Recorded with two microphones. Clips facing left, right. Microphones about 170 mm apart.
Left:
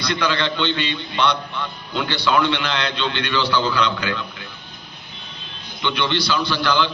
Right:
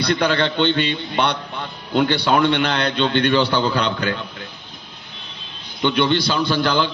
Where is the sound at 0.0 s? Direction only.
50° right (ahead or behind).